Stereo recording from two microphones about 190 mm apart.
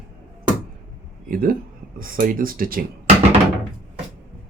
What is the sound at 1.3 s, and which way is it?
Speech, 50° right (ahead or behind).